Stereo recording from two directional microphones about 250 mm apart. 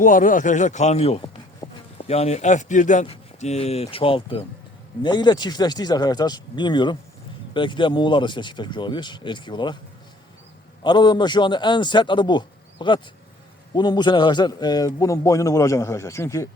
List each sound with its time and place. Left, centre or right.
0.0 s speech: left
1.6 s insect: centre
2.0 s a man's voice: left
10.8 s a man's voice: centre